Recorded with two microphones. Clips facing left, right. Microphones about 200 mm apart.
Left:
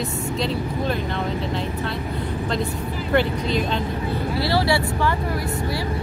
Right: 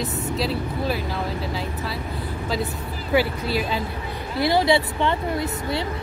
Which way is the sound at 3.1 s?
5° right (ahead or behind).